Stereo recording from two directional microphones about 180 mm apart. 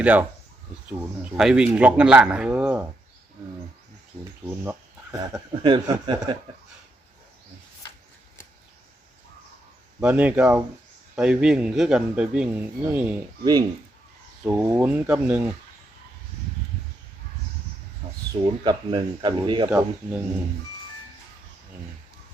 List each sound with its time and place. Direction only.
0.0 s speech: 10° right (ahead or behind)
4.4 s speech: 10° right (ahead or behind)
5.6 s speech: 25° right (ahead or behind)
10.0 s a man's voice: 10° right (ahead or behind)
13.4 s speech: 20° right (ahead or behind)
14.4 s speech: 10° right (ahead or behind)
18.3 s speech: 25° right (ahead or behind)
19.7 s speech: 10° right (ahead or behind)